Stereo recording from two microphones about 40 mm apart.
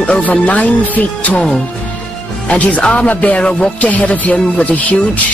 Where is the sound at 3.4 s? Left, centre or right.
Left.